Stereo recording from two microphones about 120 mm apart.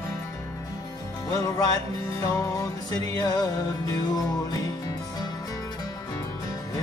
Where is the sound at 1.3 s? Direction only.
30° left (ahead or behind).